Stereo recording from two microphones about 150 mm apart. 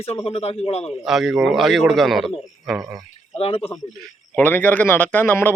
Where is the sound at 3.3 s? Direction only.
40° left (ahead or behind).